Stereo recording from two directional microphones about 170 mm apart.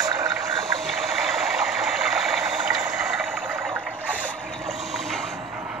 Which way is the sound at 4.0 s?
10° right (ahead or behind).